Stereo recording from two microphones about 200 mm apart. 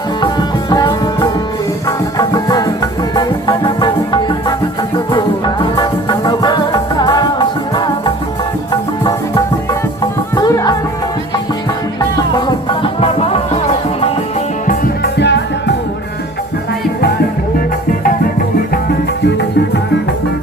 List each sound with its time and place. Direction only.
0.2 s music: 20° left (ahead or behind)
12.6 s music: 25° left (ahead or behind)
14.7 s music: 55° left (ahead or behind)